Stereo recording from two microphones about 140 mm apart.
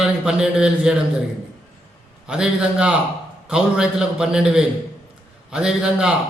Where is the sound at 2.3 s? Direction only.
5° right (ahead or behind).